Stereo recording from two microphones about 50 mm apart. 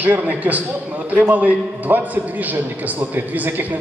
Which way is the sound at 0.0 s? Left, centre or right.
Right.